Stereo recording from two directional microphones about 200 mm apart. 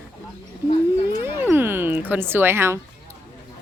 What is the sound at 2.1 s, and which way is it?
Speech, 10° right (ahead or behind).